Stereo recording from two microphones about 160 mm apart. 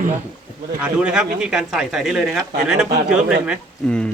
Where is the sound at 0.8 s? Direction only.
5° right (ahead or behind).